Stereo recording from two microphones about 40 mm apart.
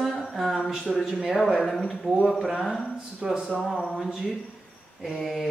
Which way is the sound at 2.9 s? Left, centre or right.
Centre.